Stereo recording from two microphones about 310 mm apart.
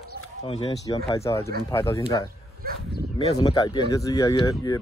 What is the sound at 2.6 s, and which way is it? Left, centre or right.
Speech, right.